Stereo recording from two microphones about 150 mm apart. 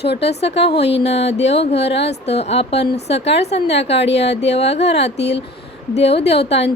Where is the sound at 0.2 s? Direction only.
45° left (ahead or behind).